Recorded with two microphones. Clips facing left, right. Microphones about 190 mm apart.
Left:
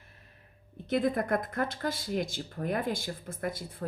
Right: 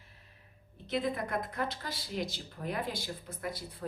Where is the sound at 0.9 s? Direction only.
50° left (ahead or behind).